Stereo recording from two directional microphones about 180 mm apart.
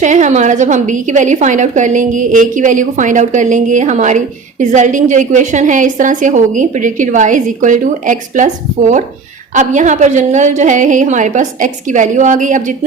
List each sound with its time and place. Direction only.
0.0 s a woman's voice: 45° right (ahead or behind)
9.6 s a woman's voice: 45° right (ahead or behind)